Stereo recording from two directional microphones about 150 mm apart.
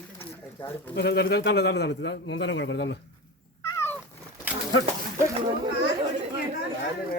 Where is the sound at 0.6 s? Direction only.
35° left (ahead or behind).